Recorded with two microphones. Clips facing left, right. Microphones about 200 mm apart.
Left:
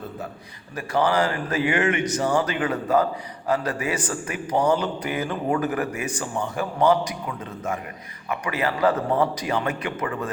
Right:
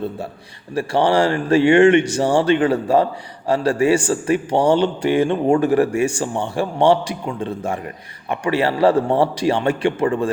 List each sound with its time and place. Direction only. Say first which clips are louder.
0.7 s speech: right 5 dB; 30° right (ahead or behind)